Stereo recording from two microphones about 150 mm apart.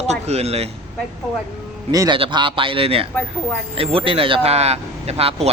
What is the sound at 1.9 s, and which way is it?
Speech, 25° right (ahead or behind).